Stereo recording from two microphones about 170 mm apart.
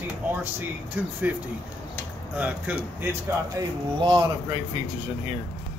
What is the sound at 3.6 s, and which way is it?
Speech, 25° right (ahead or behind).